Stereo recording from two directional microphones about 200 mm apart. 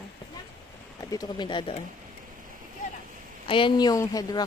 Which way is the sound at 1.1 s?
20° left (ahead or behind).